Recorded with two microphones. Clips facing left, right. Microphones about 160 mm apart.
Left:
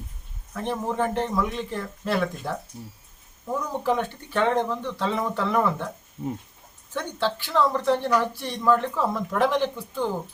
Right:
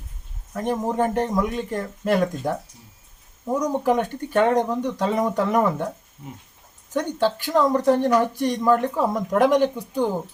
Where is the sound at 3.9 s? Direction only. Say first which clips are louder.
Right 5 dB; 45° right (ahead or behind).